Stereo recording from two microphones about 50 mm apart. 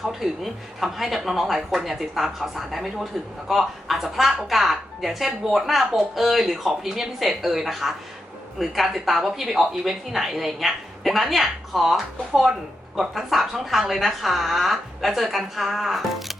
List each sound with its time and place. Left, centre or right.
0.0 s speech: centre